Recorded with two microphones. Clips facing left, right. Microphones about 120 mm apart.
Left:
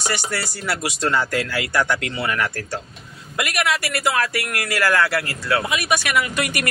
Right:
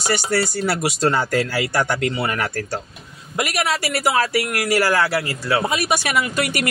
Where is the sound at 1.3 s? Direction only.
35° right (ahead or behind).